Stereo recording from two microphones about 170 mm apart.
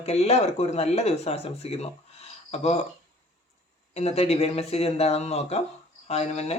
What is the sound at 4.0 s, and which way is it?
Speech, 40° left (ahead or behind).